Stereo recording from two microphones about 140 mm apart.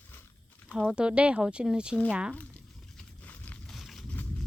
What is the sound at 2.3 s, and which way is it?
Crumpling, 10° left (ahead or behind).